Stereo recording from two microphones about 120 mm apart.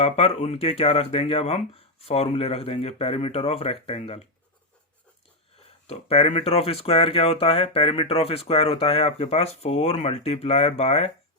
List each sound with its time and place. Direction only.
0.0 s speech: 55° left (ahead or behind)
5.9 s speech: 55° left (ahead or behind)